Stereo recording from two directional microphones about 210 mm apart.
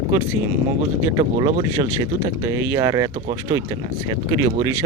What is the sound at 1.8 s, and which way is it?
A man's voice, 25° right (ahead or behind).